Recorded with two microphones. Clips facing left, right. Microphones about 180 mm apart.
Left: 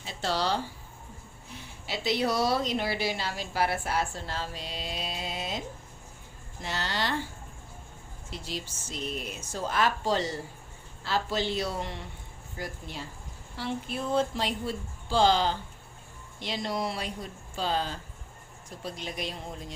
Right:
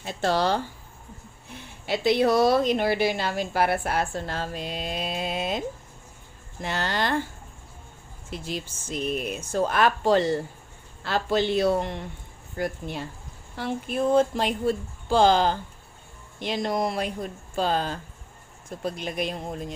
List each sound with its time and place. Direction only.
0.0 s speech: 55° right (ahead or behind)
1.9 s a woman's voice: 55° right (ahead or behind)
8.3 s a woman's voice: 55° right (ahead or behind)